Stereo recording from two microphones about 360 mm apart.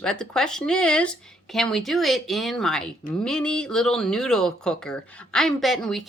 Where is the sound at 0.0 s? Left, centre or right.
Centre.